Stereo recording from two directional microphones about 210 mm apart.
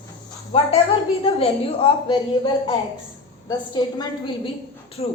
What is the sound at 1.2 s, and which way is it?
A woman's voice, 25° left (ahead or behind).